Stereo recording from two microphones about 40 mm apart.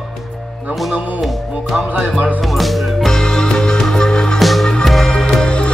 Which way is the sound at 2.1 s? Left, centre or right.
Right.